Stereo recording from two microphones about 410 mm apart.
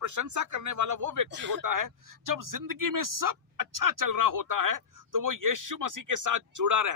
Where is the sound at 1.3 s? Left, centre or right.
Right.